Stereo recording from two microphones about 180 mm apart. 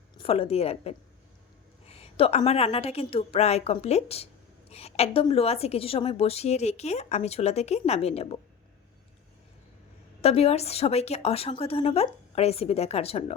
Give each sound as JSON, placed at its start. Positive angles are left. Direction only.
{"t": 0.2, "sound": "a woman's voice", "side_deg": 30}
{"t": 10.2, "sound": "a woman's voice", "side_deg": 35}